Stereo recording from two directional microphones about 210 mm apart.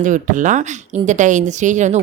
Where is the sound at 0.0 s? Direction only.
35° right (ahead or behind).